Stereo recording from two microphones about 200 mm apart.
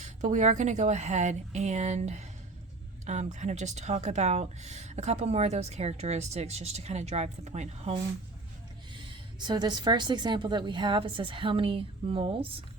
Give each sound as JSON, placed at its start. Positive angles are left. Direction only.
{"t": 0.0, "sound": "speech", "side_deg": -40}
{"t": 3.3, "sound": "speech", "side_deg": -35}
{"t": 8.9, "sound": "a woman's voice", "side_deg": -25}